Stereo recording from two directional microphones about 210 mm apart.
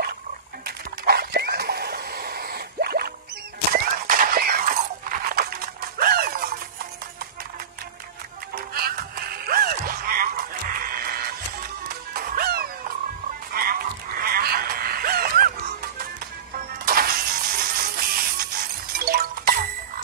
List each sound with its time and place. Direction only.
0.7 s a sound: 50° right (ahead or behind)
8.5 s music: 45° right (ahead or behind)
16.5 s music: 45° right (ahead or behind)